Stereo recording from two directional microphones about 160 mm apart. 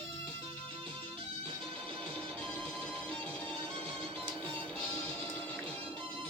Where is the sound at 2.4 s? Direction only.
5° left (ahead or behind).